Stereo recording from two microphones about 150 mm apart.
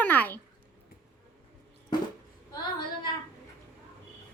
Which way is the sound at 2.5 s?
30° left (ahead or behind).